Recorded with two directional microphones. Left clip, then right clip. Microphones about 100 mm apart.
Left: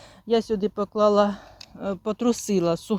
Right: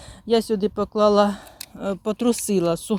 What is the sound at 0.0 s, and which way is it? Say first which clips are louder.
Speech: right 2 dB; 25° right (ahead or behind).